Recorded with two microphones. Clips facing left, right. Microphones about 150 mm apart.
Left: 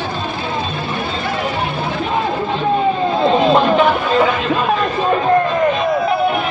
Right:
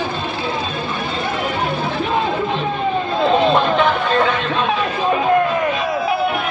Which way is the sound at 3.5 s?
5° left (ahead or behind).